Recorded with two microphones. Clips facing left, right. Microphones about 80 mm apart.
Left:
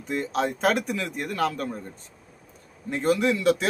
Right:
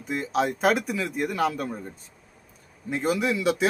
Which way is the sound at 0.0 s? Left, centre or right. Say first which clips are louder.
Right 1 dB; centre.